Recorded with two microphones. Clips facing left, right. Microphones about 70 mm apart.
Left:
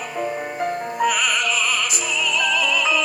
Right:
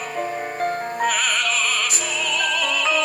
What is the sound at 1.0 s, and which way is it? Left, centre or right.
Opera, right.